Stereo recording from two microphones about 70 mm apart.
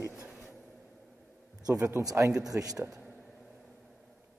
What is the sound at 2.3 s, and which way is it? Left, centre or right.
Speech, centre.